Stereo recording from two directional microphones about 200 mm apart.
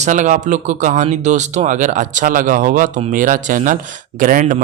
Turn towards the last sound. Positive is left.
turn(degrees=-40)  # may be behind; listen again after turning